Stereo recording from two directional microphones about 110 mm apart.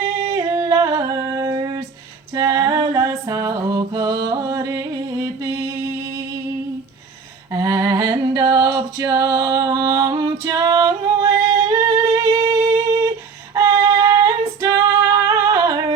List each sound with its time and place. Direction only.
0.3 s humming: 30° right (ahead or behind)
2.3 s female singing: 35° right (ahead or behind)
2.9 s music: 30° right (ahead or behind)
7.5 s a sound: 35° right (ahead or behind)
10.3 s singing: 30° right (ahead or behind)
13.5 s female singing: 35° right (ahead or behind)